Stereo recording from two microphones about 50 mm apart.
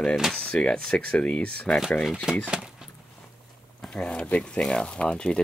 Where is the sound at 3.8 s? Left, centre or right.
Centre.